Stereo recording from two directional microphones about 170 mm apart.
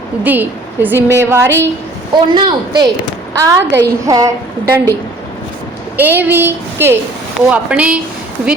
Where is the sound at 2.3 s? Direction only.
30° right (ahead or behind).